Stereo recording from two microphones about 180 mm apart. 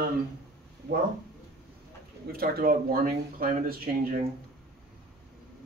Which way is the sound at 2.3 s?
55° right (ahead or behind).